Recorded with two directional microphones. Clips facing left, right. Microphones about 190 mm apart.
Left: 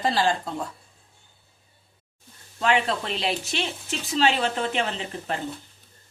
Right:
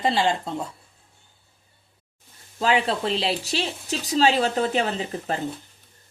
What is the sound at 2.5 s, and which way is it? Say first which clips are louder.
Speech: right 1 dB; 30° right (ahead or behind).